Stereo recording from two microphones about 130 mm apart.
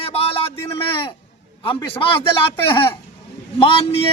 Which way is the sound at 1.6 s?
45° left (ahead or behind).